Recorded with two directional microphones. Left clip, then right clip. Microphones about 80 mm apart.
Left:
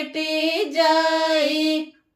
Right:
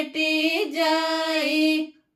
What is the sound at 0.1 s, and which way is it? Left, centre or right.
Music, right.